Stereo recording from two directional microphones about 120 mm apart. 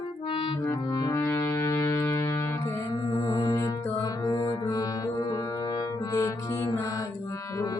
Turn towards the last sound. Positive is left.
turn(degrees=25)  # may be behind; listen again after turning